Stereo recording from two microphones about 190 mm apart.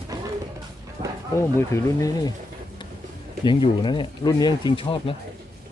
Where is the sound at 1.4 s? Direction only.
15° left (ahead or behind).